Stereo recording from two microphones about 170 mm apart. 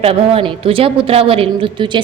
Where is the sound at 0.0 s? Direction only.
35° right (ahead or behind).